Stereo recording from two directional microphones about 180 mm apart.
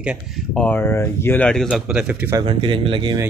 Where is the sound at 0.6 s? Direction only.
10° left (ahead or behind); by 2.4 s 10° right (ahead or behind).